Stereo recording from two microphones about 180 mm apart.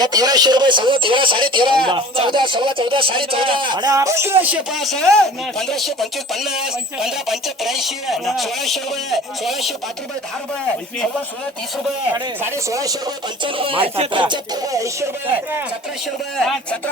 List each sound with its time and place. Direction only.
0.0 s a man's voice: 20° right (ahead or behind)
4.4 s speech: 5° right (ahead or behind)
12.4 s speech: 15° right (ahead or behind)
13.4 s a man's voice: 30° right (ahead or behind)
16.4 s speech: 5° left (ahead or behind)